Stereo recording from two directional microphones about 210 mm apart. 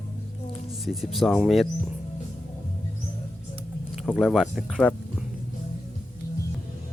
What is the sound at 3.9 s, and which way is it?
Speech, centre (ahead or behind).